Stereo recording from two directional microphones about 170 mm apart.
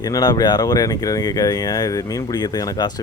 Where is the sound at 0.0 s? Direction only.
25° left (ahead or behind).